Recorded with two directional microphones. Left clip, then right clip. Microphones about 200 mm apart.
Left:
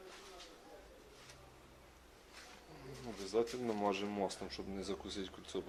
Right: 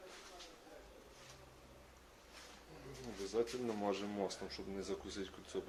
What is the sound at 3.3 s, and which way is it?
Speech, 35° left (ahead or behind).